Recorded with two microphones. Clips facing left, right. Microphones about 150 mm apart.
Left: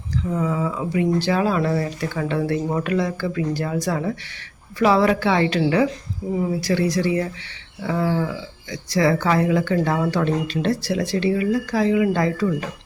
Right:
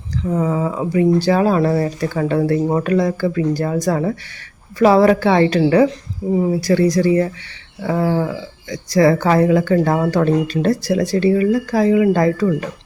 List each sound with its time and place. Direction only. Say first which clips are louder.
0.3 s speech: right 5 dB; 35° right (ahead or behind)